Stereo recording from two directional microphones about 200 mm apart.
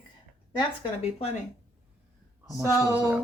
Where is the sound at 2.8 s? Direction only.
15° right (ahead or behind).